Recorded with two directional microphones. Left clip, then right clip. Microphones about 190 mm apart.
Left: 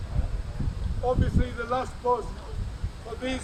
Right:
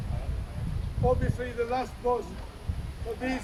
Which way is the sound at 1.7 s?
Centre (ahead or behind).